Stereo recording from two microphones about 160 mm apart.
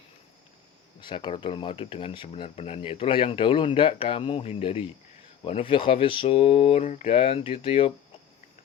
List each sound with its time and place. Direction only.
1.0 s speech: 30° left (ahead or behind)